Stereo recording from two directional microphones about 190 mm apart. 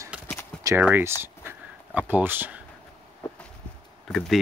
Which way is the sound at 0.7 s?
10° right (ahead or behind).